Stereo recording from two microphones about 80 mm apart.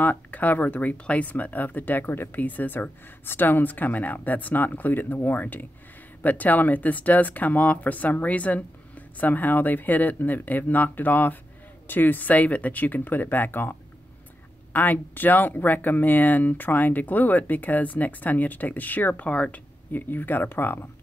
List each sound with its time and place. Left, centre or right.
0.0 s speech: left